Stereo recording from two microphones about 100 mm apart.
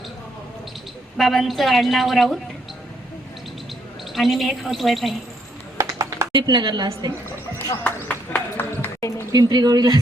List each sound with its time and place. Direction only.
1.1 s a woman's voice: centre (ahead or behind)
4.1 s a woman's voice: centre (ahead or behind)
5.7 s a sound: 30° right (ahead or behind)
6.3 s a woman's voice: 50° right (ahead or behind)
7.9 s horse: 20° left (ahead or behind)
9.3 s speech: 45° right (ahead or behind)